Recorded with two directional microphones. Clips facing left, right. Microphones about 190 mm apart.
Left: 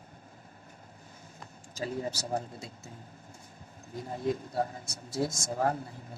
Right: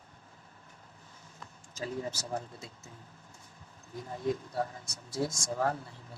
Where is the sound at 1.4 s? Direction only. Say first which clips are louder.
Left 3 dB; 35° left (ahead or behind).